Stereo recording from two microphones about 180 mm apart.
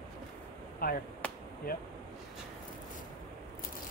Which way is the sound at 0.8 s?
55° left (ahead or behind).